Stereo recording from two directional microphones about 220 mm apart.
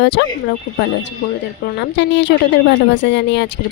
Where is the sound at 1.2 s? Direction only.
50° left (ahead or behind).